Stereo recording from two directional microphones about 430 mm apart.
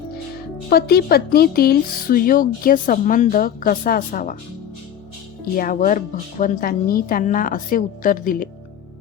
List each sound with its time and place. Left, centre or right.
0.7 s speech: left
5.5 s speech: centre